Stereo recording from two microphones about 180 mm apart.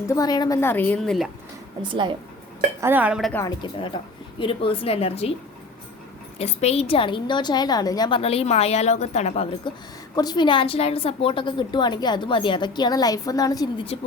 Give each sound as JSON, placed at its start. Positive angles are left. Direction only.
{"t": 0.1, "sound": "a woman's voice", "side_deg": 20}
{"t": 1.9, "sound": "speech", "side_deg": -25}
{"t": 2.8, "sound": "speech", "side_deg": -10}
{"t": 3.3, "sound": "a woman's voice", "side_deg": 20}
{"t": 6.4, "sound": "a woman's voice", "side_deg": 35}